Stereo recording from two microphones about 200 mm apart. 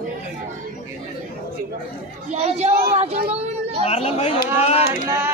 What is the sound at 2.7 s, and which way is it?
Speech, 50° right (ahead or behind).